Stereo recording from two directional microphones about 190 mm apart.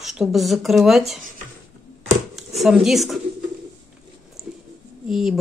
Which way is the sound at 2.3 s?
Centre (ahead or behind).